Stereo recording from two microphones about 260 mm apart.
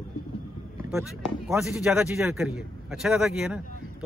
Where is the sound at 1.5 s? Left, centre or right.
Centre.